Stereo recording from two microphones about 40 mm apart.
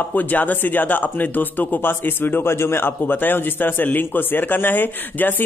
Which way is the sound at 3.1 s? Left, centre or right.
Left.